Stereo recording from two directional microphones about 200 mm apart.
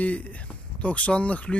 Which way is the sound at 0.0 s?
5° left (ahead or behind).